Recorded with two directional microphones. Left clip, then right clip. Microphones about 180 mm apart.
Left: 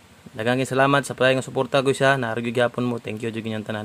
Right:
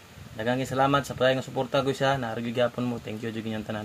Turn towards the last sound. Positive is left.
turn(degrees=30)  # may be behind; listen again after turning